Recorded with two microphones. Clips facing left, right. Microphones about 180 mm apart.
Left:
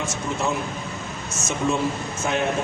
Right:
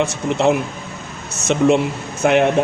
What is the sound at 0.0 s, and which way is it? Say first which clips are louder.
Speech: right 9 dB; 70° right (ahead or behind).